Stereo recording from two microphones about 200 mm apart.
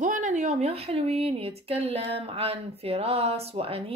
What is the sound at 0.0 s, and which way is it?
Speech, 40° right (ahead or behind).